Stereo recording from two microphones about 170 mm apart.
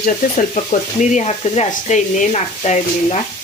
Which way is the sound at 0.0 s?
50° left (ahead or behind).